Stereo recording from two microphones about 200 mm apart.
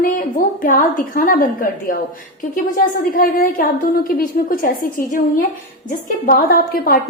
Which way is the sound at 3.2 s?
45° left (ahead or behind).